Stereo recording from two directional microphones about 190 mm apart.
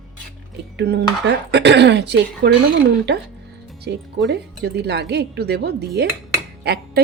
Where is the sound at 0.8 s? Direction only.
65° right (ahead or behind).